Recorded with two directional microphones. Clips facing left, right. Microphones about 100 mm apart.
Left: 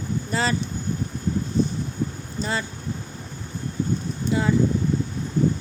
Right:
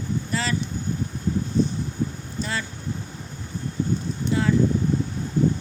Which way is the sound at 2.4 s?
25° left (ahead or behind).